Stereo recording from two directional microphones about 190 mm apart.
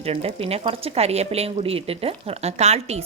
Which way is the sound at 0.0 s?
30° right (ahead or behind).